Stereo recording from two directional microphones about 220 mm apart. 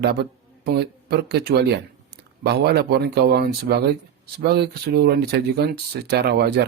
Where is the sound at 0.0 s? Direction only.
45° right (ahead or behind).